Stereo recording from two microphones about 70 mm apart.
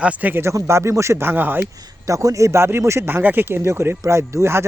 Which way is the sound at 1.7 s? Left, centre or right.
Right.